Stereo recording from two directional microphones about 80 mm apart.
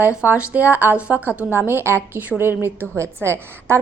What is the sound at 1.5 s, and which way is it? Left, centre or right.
A woman's voice, right.